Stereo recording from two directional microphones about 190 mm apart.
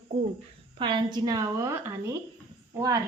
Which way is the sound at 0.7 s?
25° right (ahead or behind).